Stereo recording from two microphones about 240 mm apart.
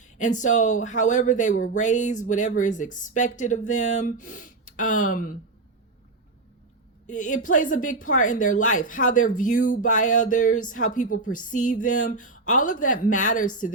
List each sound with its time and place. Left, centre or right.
0.0 s a woman's voice: left
7.1 s a woman's voice: left